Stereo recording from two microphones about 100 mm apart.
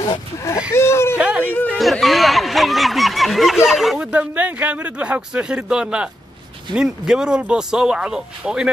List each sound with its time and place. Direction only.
0.7 s speech: 25° left (ahead or behind)
1.1 s whimper: 10° right (ahead or behind)
1.4 s chatter: 20° left (ahead or behind)
1.8 s speech: centre (ahead or behind)
4.1 s speech: 15° right (ahead or behind)